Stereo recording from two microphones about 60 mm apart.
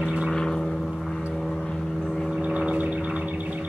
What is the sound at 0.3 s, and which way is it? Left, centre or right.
Vehicle, centre.